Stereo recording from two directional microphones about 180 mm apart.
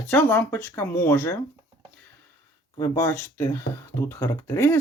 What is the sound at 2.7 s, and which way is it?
Speech, 20° left (ahead or behind).